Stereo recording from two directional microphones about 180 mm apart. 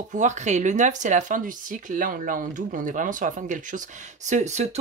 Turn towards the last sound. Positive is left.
turn(degrees=-40)  # may be behind; listen again after turning